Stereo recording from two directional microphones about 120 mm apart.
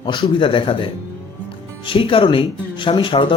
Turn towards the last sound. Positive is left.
turn(degrees=45)  # may be behind; listen again after turning